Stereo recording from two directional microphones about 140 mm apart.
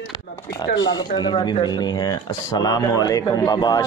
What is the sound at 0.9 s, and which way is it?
Speech, 35° left (ahead or behind).